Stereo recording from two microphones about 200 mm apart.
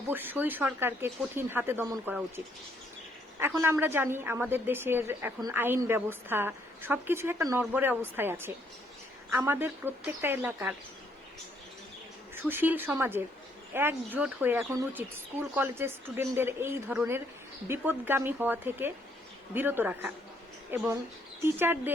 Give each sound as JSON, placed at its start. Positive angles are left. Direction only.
{"t": 0.1, "sound": "a woman's voice", "side_deg": -10}
{"t": 12.3, "sound": "a woman's voice", "side_deg": -10}